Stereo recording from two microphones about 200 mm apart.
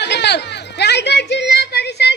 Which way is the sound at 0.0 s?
60° left (ahead or behind).